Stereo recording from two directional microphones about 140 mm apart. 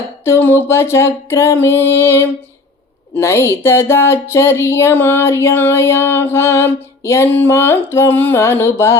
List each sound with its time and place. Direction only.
0.3 s speech: 15° left (ahead or behind)